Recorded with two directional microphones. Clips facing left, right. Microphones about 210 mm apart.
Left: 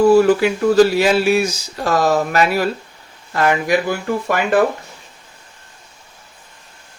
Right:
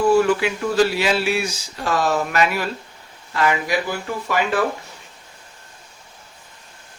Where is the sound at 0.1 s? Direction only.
35° left (ahead or behind).